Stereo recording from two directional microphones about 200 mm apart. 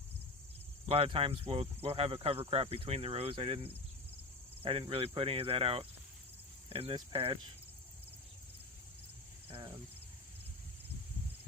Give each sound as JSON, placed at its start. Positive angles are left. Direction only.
{"t": 0.9, "sound": "speech", "side_deg": -30}